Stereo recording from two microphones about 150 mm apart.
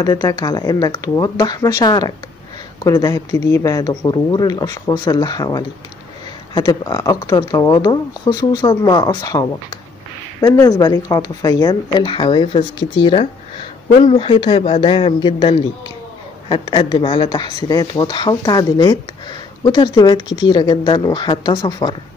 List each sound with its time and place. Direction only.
0.0 s speech: 25° left (ahead or behind)